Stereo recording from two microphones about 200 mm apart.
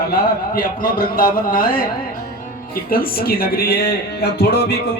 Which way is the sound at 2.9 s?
50° left (ahead or behind).